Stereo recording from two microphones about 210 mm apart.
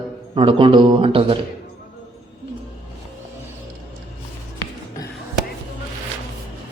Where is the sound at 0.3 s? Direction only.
25° right (ahead or behind).